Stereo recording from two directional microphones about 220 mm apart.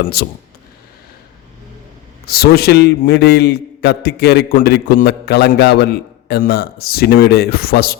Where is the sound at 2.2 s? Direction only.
45° left (ahead or behind).